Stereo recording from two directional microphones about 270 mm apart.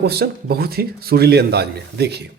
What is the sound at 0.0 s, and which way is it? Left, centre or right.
Speech, right.